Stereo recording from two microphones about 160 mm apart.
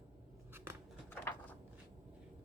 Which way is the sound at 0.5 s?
15° right (ahead or behind).